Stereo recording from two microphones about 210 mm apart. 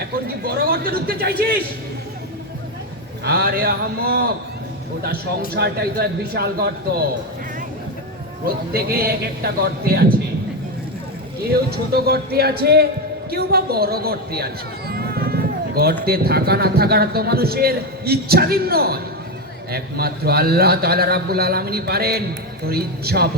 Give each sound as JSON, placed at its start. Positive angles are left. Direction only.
{"t": 0.3, "sound": "speech", "side_deg": -45}
{"t": 3.2, "sound": "a man's voice", "side_deg": -45}
{"t": 5.5, "sound": "a man's voice", "side_deg": -50}
{"t": 8.4, "sound": "a man's voice", "side_deg": -45}
{"t": 11.4, "sound": "a man's voice", "side_deg": -50}